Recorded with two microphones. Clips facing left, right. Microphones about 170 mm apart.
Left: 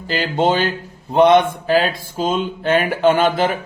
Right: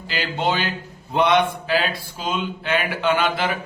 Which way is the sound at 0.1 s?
45° left (ahead or behind).